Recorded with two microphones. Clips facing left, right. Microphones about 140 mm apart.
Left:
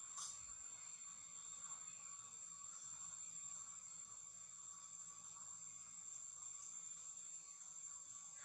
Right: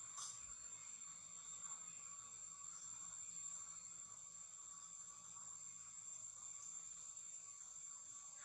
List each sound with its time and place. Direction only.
0.2 s printer: centre (ahead or behind)